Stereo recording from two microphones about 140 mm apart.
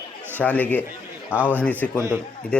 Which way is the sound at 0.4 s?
10° left (ahead or behind).